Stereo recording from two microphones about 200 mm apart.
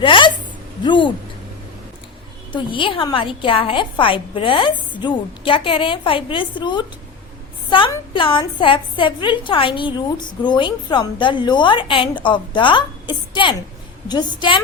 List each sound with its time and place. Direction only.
0.0 s a sound: 25° left (ahead or behind)
0.9 s a woman's voice: 25° left (ahead or behind)
2.5 s a woman's voice: 25° left (ahead or behind)